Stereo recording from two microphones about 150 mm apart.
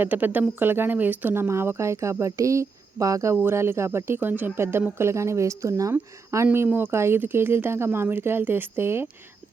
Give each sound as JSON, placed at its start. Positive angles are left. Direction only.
{"t": 0.0, "sound": "speech", "side_deg": -10}